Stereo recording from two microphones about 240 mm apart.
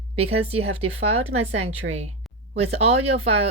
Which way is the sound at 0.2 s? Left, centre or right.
Right.